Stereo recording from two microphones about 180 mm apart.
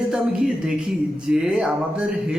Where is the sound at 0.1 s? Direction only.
5° right (ahead or behind).